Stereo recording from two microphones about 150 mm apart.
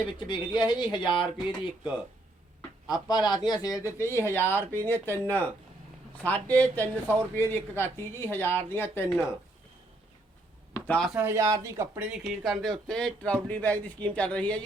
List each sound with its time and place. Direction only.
0.0 s speech: 30° left (ahead or behind)
2.6 s speech: 25° left (ahead or behind)
10.8 s a sound: 10° left (ahead or behind)
11.1 s speech: 15° right (ahead or behind); by 14.6 s 5° left (ahead or behind)